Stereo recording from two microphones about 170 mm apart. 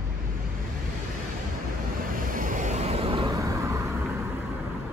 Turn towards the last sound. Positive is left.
turn(degrees=-15)  # may be behind; listen again after turning